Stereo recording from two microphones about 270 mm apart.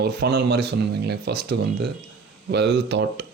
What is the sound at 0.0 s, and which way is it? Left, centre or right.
Speech, right.